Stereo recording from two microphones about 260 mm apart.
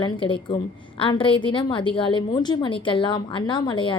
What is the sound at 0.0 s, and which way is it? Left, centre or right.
A woman's voice, centre.